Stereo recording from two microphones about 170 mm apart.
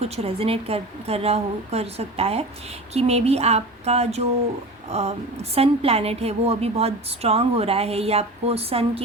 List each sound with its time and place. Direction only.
0.0 s a woman's voice: 35° right (ahead or behind)